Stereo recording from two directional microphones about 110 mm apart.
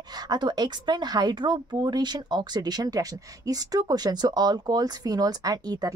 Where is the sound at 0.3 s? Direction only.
40° right (ahead or behind).